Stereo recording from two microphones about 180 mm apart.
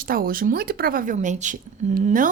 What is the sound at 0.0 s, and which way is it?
A woman's voice, 55° right (ahead or behind).